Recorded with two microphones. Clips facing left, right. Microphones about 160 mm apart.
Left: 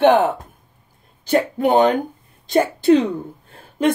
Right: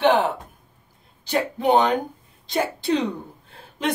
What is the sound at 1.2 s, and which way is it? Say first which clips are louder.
Speech: left 4 dB; 50° left (ahead or behind).